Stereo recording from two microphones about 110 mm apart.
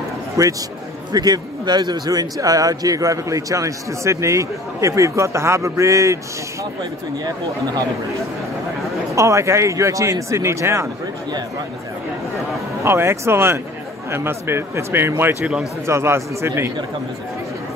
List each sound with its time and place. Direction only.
0.4 s a man's voice: 30° right (ahead or behind)
6.8 s speech: 40° right (ahead or behind)
9.1 s a man's voice: 30° right (ahead or behind)
12.8 s a man's voice: 25° right (ahead or behind)